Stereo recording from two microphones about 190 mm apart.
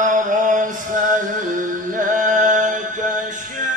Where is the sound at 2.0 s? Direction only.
40° right (ahead or behind).